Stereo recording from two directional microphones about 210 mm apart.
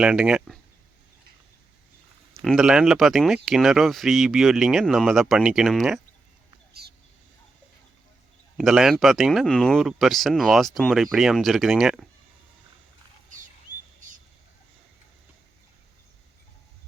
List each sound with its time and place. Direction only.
0.0 s speech: 5° right (ahead or behind)
2.4 s speech: centre (ahead or behind)
8.5 s speech: centre (ahead or behind)